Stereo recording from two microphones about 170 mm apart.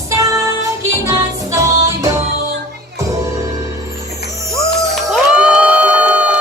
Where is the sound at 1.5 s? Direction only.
20° right (ahead or behind).